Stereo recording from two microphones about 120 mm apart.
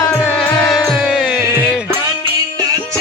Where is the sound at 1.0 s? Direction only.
5° right (ahead or behind).